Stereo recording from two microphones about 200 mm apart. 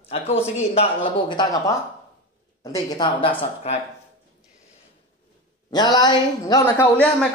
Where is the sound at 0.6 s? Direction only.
30° left (ahead or behind).